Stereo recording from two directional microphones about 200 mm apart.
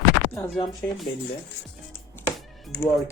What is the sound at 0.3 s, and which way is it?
Speech, 15° left (ahead or behind).